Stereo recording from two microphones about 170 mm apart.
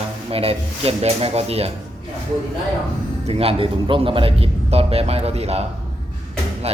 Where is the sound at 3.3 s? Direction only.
35° right (ahead or behind).